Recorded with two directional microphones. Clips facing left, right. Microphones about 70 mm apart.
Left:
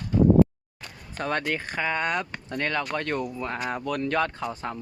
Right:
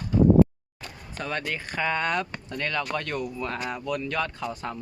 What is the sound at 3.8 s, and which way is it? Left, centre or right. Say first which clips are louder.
Speech: left 4 dB; left.